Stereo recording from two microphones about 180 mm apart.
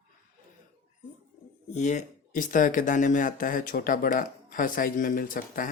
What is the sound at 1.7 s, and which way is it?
Speech, 40° left (ahead or behind).